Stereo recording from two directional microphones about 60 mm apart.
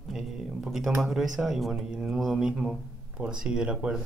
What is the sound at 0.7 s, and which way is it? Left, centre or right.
Speech, centre.